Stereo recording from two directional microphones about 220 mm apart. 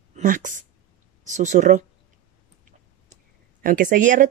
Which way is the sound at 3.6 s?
40° right (ahead or behind).